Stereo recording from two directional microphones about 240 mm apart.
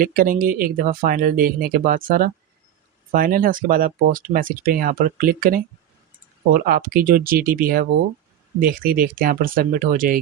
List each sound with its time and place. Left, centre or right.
0.0 s speech: right